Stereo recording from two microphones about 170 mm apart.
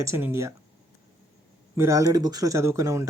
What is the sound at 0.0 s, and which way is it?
Speech, 15° right (ahead or behind).